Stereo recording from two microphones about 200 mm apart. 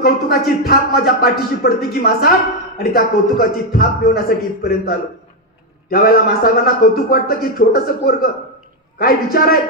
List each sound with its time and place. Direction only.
0.0 s a man's voice: 50° left (ahead or behind)